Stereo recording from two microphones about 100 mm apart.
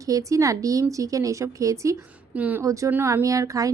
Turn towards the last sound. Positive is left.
turn(degrees=-35)  # may be behind; listen again after turning